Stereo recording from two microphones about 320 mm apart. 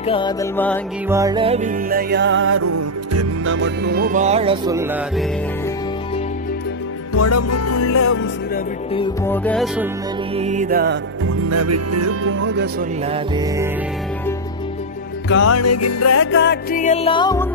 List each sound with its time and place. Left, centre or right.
0.0 s music: centre
1.0 s music: centre; by 2.6 s right
2.6 s music: right
3.6 s music: right; by 4.8 s centre
7.2 s music: left
8.9 s music: centre
10.3 s music: right
11.2 s music: right
15.2 s music: left
16.3 s music: left; by 17.5 s centre